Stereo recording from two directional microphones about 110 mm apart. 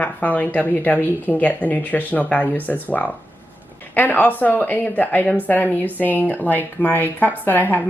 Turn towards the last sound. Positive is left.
turn(degrees=15)  # may be behind; listen again after turning